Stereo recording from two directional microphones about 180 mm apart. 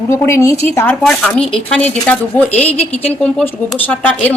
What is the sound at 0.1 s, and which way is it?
Speech, 15° left (ahead or behind).